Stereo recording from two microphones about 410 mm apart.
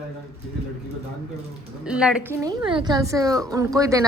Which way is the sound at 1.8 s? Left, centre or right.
Centre.